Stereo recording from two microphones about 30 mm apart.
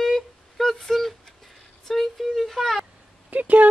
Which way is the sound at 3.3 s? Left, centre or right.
Right.